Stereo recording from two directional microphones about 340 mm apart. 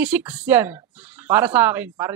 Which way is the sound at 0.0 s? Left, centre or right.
Centre.